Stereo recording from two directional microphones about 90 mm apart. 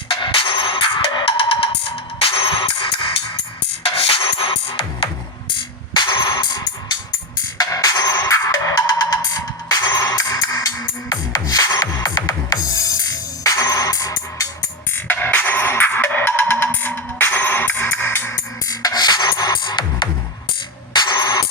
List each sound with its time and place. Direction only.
0.1 s music: 70° left (ahead or behind)
3.8 s music: 90° left
5.5 s music: 65° left (ahead or behind)
7.6 s music: 45° left (ahead or behind)
15.0 s music: 20° left (ahead or behind)
18.7 s music: 45° left (ahead or behind)